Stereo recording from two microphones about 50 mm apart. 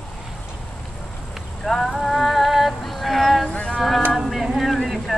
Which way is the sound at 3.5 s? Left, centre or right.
Centre.